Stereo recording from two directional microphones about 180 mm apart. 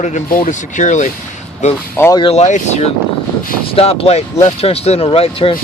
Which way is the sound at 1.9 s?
15° left (ahead or behind).